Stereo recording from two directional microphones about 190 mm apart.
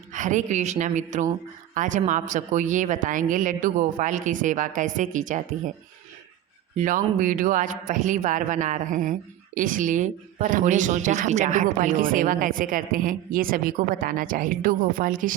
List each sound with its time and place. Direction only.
0.1 s a woman's voice: 40° right (ahead or behind)
6.7 s speech: 45° right (ahead or behind)